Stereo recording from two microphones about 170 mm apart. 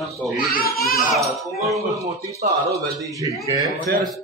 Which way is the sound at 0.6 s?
60° left (ahead or behind).